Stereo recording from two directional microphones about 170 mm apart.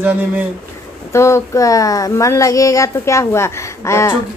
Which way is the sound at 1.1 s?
15° left (ahead or behind).